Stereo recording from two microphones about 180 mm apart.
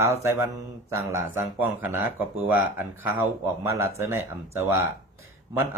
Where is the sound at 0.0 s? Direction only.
15° right (ahead or behind).